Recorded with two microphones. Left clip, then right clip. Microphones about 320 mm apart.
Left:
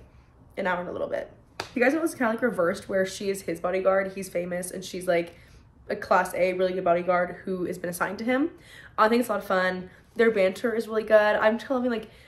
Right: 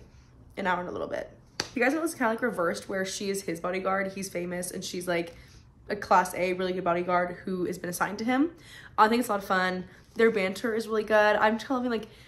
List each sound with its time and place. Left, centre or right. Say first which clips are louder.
0.6 s a woman's voice: left 2 dB; centre
1.6 s a sound: left 3 dB; centre
2.1 s a woman's voice: left 2 dB; centre